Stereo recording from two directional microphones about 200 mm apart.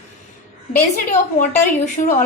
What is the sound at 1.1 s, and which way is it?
A woman's voice, 40° left (ahead or behind).